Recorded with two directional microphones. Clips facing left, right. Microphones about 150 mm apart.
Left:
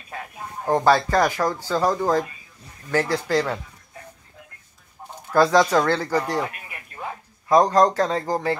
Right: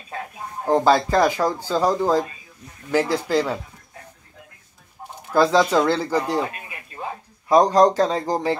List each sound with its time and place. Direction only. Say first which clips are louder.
0.7 s speech: right 1 dB; 15° right (ahead or behind)
5.3 s speech: even; 10° right (ahead or behind)